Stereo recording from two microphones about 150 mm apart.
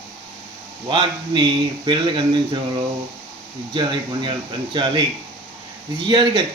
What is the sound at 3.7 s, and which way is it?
Speech, 30° right (ahead or behind).